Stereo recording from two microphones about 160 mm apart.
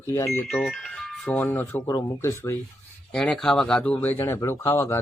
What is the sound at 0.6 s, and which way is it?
Speech, 5° left (ahead or behind).